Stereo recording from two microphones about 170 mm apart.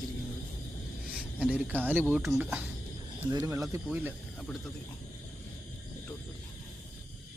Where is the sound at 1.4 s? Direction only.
10° right (ahead or behind).